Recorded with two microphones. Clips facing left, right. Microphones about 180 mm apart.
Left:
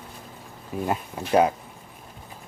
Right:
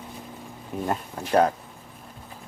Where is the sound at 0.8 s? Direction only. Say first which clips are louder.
Left 1 dB; 5° left (ahead or behind).